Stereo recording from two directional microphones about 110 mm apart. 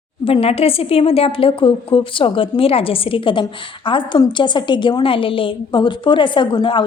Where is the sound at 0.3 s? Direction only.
60° left (ahead or behind).